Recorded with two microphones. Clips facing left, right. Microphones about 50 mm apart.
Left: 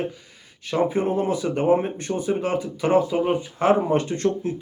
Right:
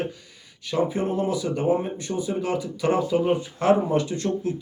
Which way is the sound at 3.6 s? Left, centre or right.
Left.